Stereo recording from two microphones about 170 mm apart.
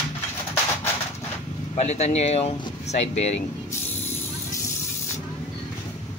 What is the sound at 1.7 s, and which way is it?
Speech, 40° left (ahead or behind).